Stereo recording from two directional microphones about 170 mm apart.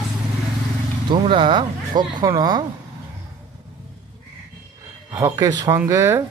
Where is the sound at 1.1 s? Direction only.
30° right (ahead or behind).